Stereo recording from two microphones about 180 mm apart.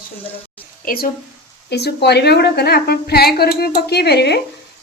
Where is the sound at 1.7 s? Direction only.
65° left (ahead or behind).